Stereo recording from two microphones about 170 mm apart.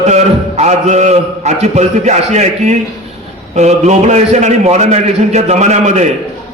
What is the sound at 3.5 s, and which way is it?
A man's voice, 40° right (ahead or behind).